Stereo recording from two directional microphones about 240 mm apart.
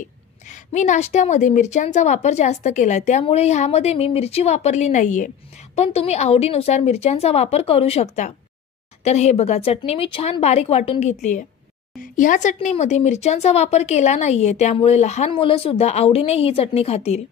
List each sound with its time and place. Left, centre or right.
0.5 s speech: left